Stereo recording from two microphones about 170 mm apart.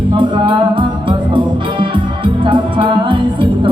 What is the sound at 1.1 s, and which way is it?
Music, 30° right (ahead or behind).